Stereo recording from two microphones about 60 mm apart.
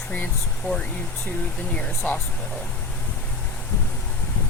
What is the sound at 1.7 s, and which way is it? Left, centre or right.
Speech, centre.